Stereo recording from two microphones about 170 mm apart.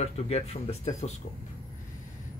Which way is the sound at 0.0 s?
40° left (ahead or behind).